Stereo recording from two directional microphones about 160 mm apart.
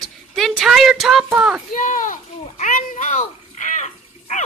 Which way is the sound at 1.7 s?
55° left (ahead or behind).